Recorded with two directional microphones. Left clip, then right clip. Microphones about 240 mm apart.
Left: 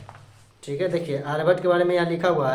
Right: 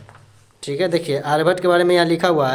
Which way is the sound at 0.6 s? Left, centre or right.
Right.